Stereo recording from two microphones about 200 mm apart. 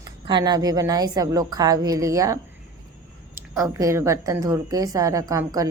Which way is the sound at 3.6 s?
15° right (ahead or behind).